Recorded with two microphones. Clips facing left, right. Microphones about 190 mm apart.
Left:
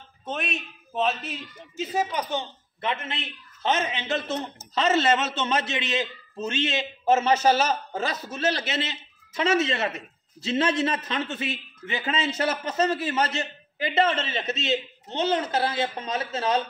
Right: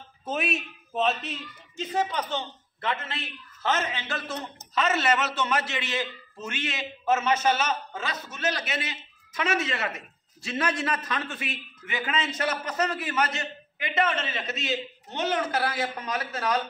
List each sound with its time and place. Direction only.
0.2 s a man's voice: 5° right (ahead or behind); by 16.6 s 25° left (ahead or behind)